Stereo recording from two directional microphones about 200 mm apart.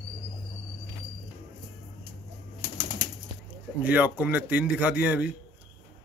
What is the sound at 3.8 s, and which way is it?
A man's voice, 10° right (ahead or behind).